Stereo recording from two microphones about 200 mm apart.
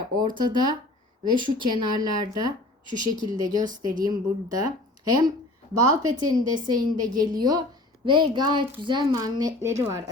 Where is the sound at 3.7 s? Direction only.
40° right (ahead or behind).